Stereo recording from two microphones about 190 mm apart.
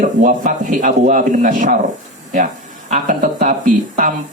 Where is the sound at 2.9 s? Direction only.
40° right (ahead or behind).